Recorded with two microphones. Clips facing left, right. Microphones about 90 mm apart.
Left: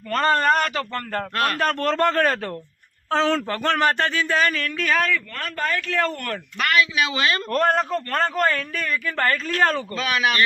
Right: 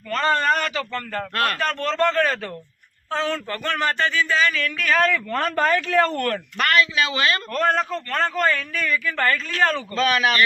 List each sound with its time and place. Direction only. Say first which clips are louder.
0.1 s speech: left 1 dB; 45° left (ahead or behind)
1.2 s a woman's voice: even; 20° left (ahead or behind)
1.5 s speech: left 1 dB; 50° left (ahead or behind)
3.1 s speech: left 4 dB; 90° left; by 4.7 s 45° left (ahead or behind)
4.9 s speech: right 3 dB; 5° left (ahead or behind)
5.3 s speech: right 6 dB; 35° right (ahead or behind)
6.0 s speech: right 4 dB; 5° left (ahead or behind)
6.9 s a woman's voice: even; 20° left (ahead or behind)
7.5 s a man's voice: left 1 dB; 45° left (ahead or behind)
9.9 s speech: right 3 dB; 5° left (ahead or behind)